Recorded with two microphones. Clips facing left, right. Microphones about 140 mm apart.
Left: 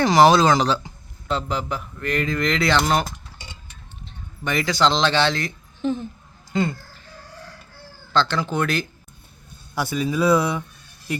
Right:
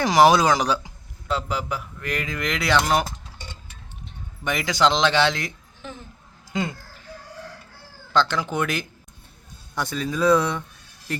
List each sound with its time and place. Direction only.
0.0 s speech: 10° right (ahead or behind)
4.0 s speech: 15° right (ahead or behind)
5.8 s speech: 25° left (ahead or behind)
6.5 s speech: 15° right (ahead or behind)
8.1 s speech: 15° right (ahead or behind)
9.7 s speech: 10° left (ahead or behind)